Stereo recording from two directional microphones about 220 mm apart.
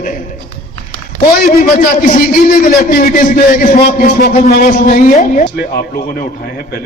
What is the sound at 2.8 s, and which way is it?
A man's voice, 40° left (ahead or behind).